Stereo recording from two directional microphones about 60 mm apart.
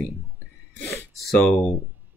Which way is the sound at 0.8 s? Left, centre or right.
Left.